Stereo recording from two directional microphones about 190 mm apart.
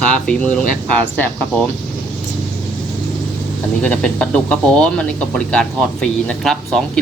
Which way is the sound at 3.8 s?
5° left (ahead or behind).